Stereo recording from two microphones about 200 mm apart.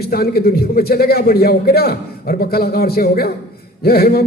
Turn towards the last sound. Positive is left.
turn(degrees=50)  # may be behind; listen again after turning